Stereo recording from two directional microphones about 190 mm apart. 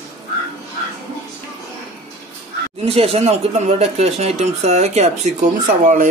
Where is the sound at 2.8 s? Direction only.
35° right (ahead or behind).